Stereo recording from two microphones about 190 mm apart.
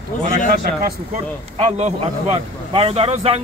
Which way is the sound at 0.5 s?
50° right (ahead or behind).